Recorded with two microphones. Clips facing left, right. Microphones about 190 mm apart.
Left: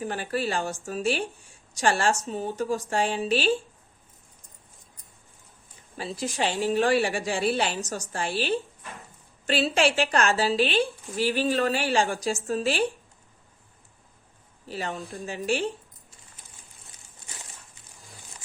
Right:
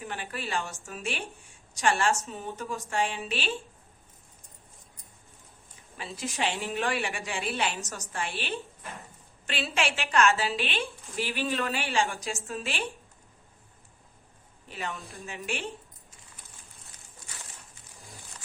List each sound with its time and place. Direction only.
0.0 s a woman's voice: 40° left (ahead or behind)
6.0 s a woman's voice: 35° left (ahead or behind)
14.7 s a woman's voice: 35° left (ahead or behind)